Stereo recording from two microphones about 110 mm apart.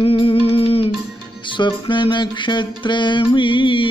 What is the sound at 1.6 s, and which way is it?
Music, 45° left (ahead or behind).